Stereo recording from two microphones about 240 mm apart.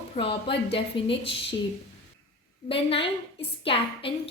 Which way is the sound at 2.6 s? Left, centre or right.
Left.